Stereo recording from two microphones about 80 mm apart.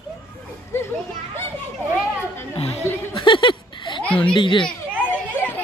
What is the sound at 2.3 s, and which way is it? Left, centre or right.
Chatter, left.